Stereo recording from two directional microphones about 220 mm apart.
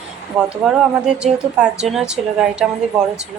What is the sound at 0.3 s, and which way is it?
A woman's voice, 5° right (ahead or behind).